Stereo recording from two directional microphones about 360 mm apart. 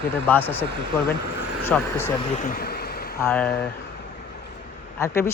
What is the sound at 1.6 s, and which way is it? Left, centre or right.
Speech, centre.